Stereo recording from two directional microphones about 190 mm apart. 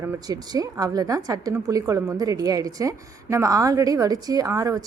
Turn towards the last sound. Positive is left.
turn(degrees=-20)  # may be behind; listen again after turning